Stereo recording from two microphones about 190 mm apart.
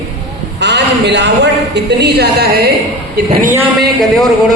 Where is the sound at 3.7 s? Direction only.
Centre (ahead or behind).